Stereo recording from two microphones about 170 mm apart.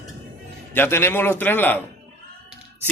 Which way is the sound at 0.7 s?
15° left (ahead or behind).